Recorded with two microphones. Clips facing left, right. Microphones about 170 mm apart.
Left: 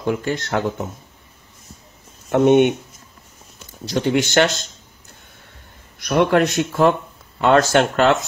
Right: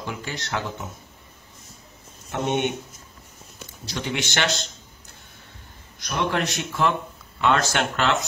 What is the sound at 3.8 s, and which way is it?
Speech, 45° left (ahead or behind).